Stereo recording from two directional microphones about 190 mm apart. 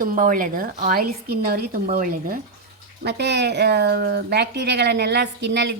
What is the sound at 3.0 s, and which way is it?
Speech, 60° right (ahead or behind).